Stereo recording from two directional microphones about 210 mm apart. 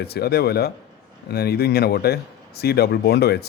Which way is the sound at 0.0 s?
50° left (ahead or behind).